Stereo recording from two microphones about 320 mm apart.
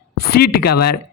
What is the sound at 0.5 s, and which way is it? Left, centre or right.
Speech, left.